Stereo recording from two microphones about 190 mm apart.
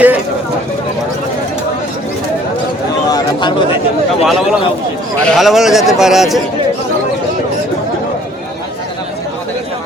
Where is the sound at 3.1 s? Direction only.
20° left (ahead or behind).